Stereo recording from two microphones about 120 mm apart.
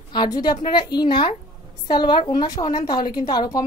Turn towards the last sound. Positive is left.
turn(degrees=35)  # may be behind; listen again after turning